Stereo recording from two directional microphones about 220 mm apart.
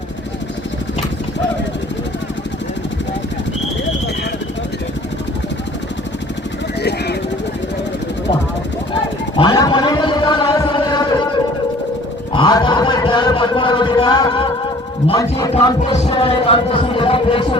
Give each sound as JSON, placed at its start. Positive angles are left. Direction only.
{"t": 9.4, "sound": "a sound", "side_deg": 20}
{"t": 12.3, "sound": "music", "side_deg": 20}
{"t": 15.0, "sound": "speech", "side_deg": 15}